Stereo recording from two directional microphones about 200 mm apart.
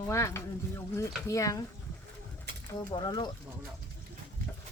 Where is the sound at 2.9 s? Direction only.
20° left (ahead or behind).